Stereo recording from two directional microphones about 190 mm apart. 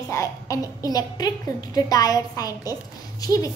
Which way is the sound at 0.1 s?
15° left (ahead or behind).